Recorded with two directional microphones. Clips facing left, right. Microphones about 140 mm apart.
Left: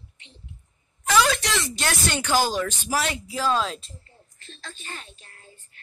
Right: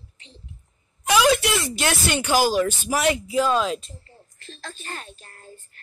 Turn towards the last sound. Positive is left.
turn(degrees=-45)  # may be behind; listen again after turning